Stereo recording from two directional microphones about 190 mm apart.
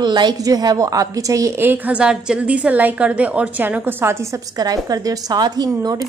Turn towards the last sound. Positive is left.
turn(degrees=-20)  # may be behind; listen again after turning